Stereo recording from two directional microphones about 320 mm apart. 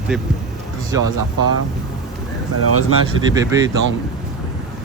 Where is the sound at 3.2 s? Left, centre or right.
Centre.